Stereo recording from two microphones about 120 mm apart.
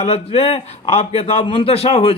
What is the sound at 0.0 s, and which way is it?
A man's voice, 55° left (ahead or behind).